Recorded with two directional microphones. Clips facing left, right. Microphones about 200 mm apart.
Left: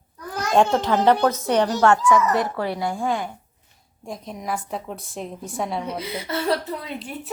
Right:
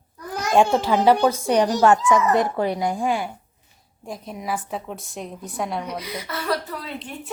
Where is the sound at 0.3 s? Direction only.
10° right (ahead or behind).